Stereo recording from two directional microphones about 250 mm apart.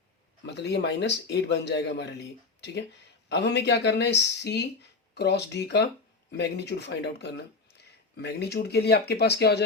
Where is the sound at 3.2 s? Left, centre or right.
Left.